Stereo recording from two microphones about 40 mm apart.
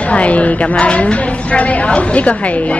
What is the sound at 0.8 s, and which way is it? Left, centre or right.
A woman's voice, left.